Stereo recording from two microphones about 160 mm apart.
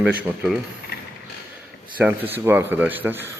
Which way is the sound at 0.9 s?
80° left.